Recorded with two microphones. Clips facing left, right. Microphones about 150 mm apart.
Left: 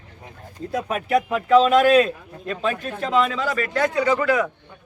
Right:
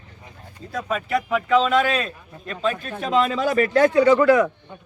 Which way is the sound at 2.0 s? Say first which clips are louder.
Left 9 dB; 5° left (ahead or behind).